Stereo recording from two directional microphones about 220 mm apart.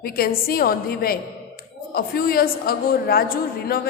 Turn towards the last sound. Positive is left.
turn(degrees=45)  # may be behind; listen again after turning